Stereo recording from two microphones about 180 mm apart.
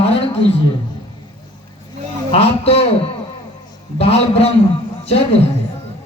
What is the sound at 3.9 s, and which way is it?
Speech, 35° left (ahead or behind).